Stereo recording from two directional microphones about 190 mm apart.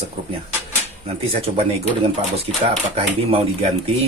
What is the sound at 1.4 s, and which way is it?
Speech, 30° right (ahead or behind).